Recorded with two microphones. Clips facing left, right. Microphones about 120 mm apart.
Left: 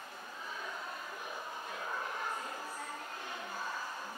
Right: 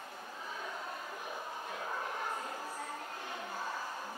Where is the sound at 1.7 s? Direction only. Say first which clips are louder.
Right 1 dB; 35° right (ahead or behind).